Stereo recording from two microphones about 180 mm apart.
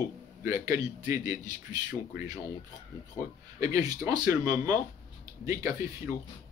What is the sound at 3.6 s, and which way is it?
A man's voice, 20° right (ahead or behind).